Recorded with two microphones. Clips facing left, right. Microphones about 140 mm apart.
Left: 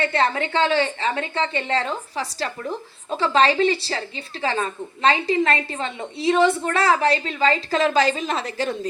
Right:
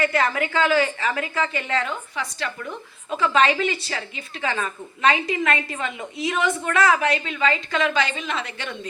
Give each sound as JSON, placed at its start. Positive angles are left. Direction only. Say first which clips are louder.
{"t": 0.0, "sound": "a woman's voice", "louder": "even", "side_deg": 30}